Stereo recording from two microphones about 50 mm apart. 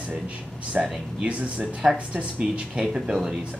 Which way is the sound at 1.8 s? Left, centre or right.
Centre.